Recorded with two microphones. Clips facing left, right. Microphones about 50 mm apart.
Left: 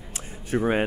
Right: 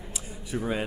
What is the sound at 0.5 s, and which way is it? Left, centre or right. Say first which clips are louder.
Speech: left 7 dB; left.